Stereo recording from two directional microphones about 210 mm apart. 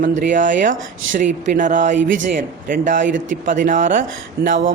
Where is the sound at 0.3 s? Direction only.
40° right (ahead or behind).